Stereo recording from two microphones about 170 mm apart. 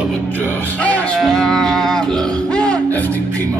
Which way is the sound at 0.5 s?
10° left (ahead or behind).